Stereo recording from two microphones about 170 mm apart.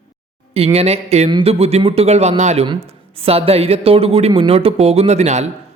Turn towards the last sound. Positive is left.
turn(degrees=-40)  # may be behind; listen again after turning